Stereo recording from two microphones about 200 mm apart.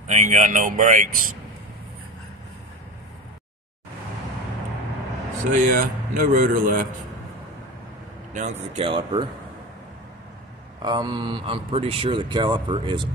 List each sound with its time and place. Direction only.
0.0 s speech: 40° right (ahead or behind)
5.4 s speech: 40° right (ahead or behind)
8.7 s speech: 25° right (ahead or behind)
10.8 s speech: 20° right (ahead or behind)